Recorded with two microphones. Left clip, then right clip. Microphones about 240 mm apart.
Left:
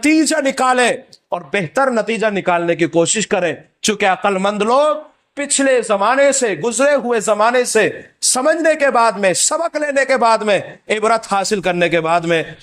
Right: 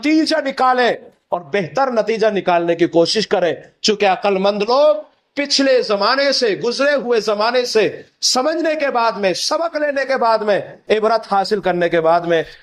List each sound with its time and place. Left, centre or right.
0.0 s a man's voice: left